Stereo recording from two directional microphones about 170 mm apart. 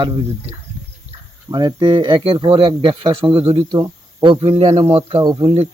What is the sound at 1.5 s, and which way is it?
Speech, 25° right (ahead or behind).